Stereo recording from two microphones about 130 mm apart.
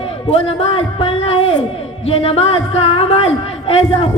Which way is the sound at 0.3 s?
45° left (ahead or behind).